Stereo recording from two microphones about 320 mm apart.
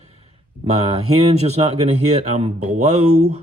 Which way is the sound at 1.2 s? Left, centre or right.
Centre.